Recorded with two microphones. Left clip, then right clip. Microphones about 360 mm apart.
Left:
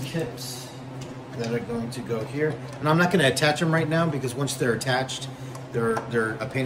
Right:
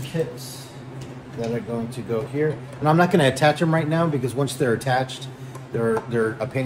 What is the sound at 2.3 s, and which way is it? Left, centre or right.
Speech, centre.